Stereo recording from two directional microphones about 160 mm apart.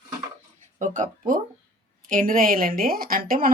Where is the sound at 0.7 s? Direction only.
55° right (ahead or behind).